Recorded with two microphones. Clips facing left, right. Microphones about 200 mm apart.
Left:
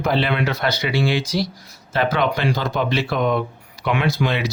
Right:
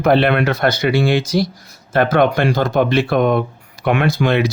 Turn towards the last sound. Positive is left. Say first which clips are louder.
# right 5 dB
turn(degrees=-50)  # may be behind; listen again after turning